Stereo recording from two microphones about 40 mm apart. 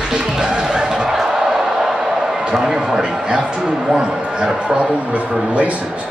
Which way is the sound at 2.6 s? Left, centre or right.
Centre.